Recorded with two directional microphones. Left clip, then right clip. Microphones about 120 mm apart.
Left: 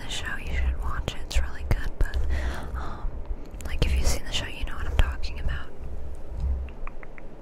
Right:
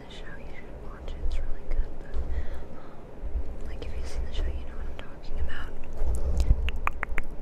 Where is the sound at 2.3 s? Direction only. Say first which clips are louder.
Left 8 dB; 90° left.